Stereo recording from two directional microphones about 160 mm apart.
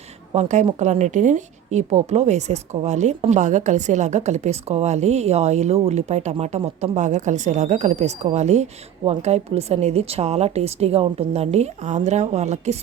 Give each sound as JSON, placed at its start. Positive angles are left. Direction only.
{"t": 0.3, "sound": "a woman's voice", "side_deg": -45}